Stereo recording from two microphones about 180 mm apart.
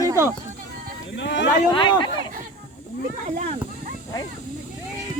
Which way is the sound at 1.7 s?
25° left (ahead or behind).